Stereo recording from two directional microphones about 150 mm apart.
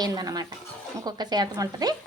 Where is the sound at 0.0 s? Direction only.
25° right (ahead or behind).